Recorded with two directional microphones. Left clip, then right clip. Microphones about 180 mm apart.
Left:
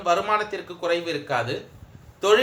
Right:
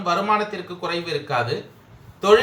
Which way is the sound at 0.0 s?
55° left (ahead or behind).